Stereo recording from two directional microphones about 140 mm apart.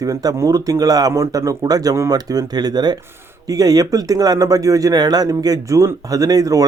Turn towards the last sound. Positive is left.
turn(degrees=-25)  # may be behind; listen again after turning